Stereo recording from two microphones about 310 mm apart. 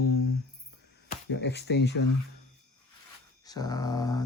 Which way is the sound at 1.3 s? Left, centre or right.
Left.